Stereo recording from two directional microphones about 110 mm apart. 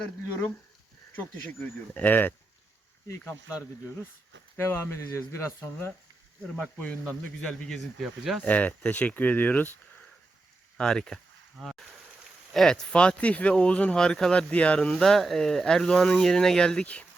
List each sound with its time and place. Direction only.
1.9 s speech: 15° left (ahead or behind)
4.5 s speech: 20° left (ahead or behind)
6.6 s speech: 10° left (ahead or behind)
8.4 s speech: 15° left (ahead or behind)
10.8 s speech: 5° left (ahead or behind)